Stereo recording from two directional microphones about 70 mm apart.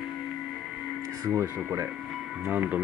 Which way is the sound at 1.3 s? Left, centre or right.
Right.